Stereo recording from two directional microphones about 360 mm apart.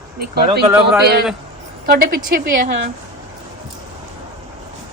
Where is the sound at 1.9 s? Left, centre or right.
Right.